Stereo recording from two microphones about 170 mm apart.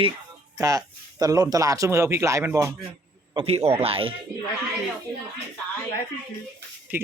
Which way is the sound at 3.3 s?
35° right (ahead or behind).